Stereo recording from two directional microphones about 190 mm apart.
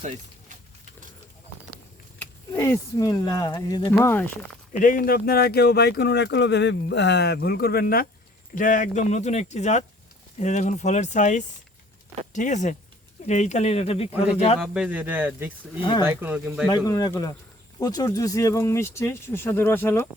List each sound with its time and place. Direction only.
0.0 s a sound: 40° right (ahead or behind)
2.1 s speech: 15° left (ahead or behind)
4.7 s speech: 45° left (ahead or behind)
14.6 s speech: 5° right (ahead or behind)
15.8 s speech: 25° left (ahead or behind)
16.0 s speech: 10° right (ahead or behind)
16.6 s speech: 20° left (ahead or behind)